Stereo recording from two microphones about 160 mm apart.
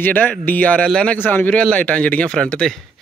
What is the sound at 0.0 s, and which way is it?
A man's voice, 10° left (ahead or behind).